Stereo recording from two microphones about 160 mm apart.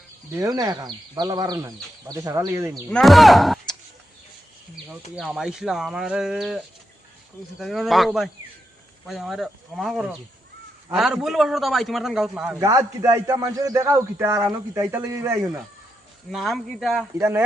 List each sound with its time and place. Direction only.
0.3 s a man's voice: 20° right (ahead or behind)
2.9 s speech: centre (ahead or behind)
5.1 s a man's voice: 5° right (ahead or behind)
7.6 s a man's voice: centre (ahead or behind)
12.5 s a man's voice: 20° right (ahead or behind)
16.3 s a man's voice: centre (ahead or behind)
17.2 s speech: 15° right (ahead or behind)